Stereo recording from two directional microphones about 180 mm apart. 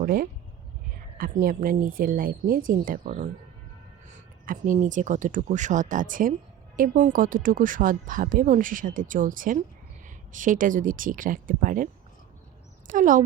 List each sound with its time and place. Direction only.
0.0 s speech: 55° right (ahead or behind)
12.9 s speech: 45° right (ahead or behind)